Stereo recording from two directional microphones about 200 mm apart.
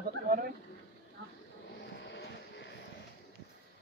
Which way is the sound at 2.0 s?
60° left (ahead or behind).